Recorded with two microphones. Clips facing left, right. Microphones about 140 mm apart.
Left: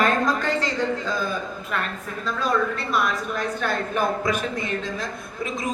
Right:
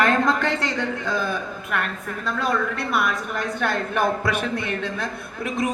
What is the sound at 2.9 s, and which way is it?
A man's voice, 60° right (ahead or behind).